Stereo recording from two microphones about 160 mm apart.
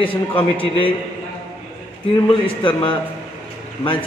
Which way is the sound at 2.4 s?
30° left (ahead or behind).